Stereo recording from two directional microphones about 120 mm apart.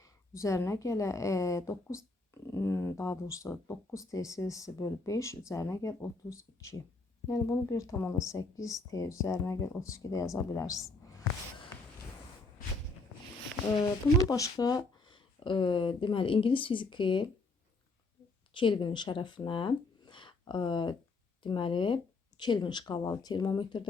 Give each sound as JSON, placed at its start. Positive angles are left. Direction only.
{"t": 0.0, "sound": "a woman's voice", "side_deg": 25}
{"t": 13.8, "sound": "a woman's voice", "side_deg": 30}
{"t": 18.5, "sound": "speech", "side_deg": 45}